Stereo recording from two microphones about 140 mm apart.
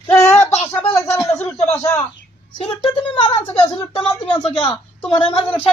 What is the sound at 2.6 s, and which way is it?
A woman's voice, 40° left (ahead or behind).